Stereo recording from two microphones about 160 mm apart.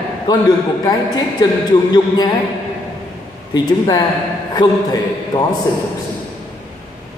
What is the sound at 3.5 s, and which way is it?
A man's voice, 25° left (ahead or behind).